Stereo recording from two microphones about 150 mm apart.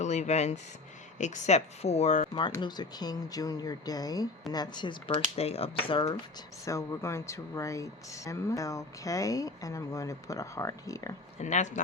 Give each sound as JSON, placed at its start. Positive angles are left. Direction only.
{"t": 0.0, "sound": "speech", "side_deg": 50}
{"t": 2.6, "sound": "speech", "side_deg": 30}
{"t": 5.4, "sound": "speech", "side_deg": 40}
{"t": 6.7, "sound": "speech", "side_deg": 20}
{"t": 11.3, "sound": "speech", "side_deg": 50}